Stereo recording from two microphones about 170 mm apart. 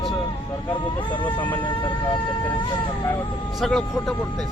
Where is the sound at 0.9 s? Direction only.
25° left (ahead or behind).